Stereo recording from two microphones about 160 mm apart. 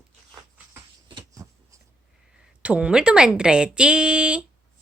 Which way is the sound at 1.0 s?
30° right (ahead or behind).